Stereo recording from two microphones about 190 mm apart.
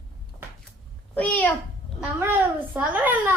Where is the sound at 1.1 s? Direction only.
10° left (ahead or behind).